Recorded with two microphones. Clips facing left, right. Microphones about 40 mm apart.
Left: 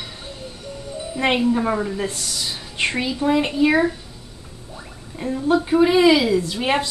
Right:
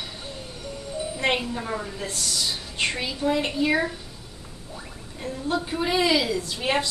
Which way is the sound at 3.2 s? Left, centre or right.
Centre.